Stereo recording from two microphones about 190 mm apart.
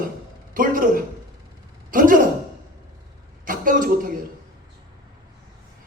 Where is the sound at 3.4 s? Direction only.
45° right (ahead or behind).